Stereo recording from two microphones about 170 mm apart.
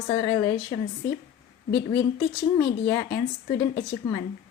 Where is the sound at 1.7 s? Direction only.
70° left (ahead or behind).